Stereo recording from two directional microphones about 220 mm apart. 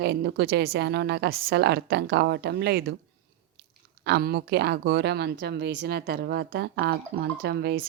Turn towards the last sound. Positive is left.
turn(degrees=-50)  # may be behind; listen again after turning